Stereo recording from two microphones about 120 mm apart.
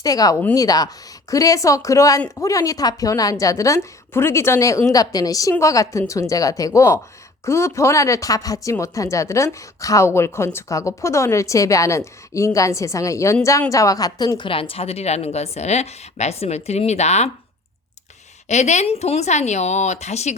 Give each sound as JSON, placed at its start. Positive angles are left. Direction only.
{"t": 0.0, "sound": "speech", "side_deg": 30}
{"t": 18.4, "sound": "speech", "side_deg": 70}